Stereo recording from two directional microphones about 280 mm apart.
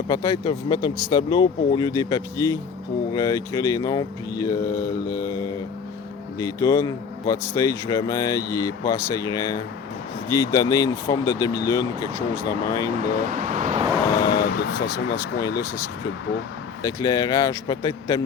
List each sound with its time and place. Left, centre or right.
0.1 s speech: centre
6.4 s speech: centre
13.0 s speech: right
14.3 s vehicle: left
15.1 s speech: centre
16.8 s speech: centre